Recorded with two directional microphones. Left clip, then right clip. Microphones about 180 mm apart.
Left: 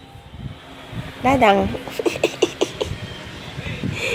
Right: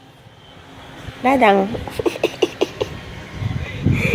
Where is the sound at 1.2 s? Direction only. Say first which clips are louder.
Right 1 dB; 5° right (ahead or behind).